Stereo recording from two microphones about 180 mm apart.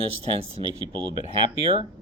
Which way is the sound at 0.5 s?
30° right (ahead or behind).